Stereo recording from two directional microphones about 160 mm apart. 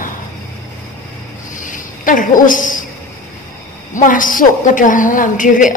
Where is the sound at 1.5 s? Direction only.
55° left (ahead or behind).